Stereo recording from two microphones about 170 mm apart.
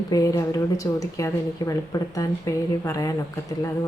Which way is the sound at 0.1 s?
20° left (ahead or behind).